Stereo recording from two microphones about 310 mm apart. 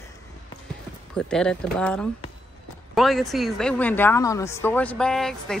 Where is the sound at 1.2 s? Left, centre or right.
Centre.